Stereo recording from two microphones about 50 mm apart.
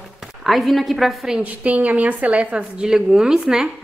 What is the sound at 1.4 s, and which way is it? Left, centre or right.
A woman's voice, right.